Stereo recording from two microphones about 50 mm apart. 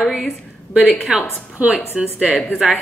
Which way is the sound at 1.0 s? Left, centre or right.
Centre.